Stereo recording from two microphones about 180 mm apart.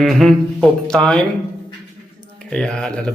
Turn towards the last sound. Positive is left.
turn(degrees=5)  # may be behind; listen again after turning